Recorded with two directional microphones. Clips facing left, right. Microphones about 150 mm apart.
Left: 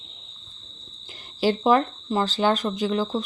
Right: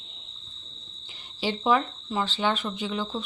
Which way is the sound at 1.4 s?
45° left (ahead or behind).